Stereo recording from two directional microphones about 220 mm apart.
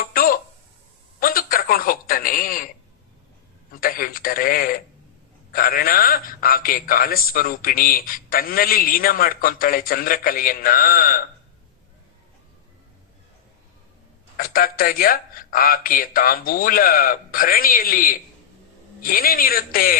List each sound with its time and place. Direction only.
0.0 s a sound: 40° left (ahead or behind)
3.7 s a man's voice: 40° left (ahead or behind)
14.3 s a man's voice: 40° left (ahead or behind)